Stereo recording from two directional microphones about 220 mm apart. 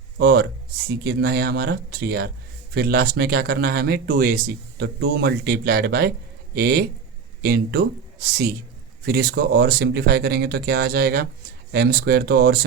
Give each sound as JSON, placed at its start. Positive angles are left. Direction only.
{"t": 0.2, "sound": "speech", "side_deg": -45}